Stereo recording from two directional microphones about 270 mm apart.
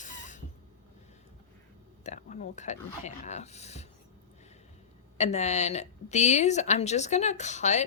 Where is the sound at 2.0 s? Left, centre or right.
Left.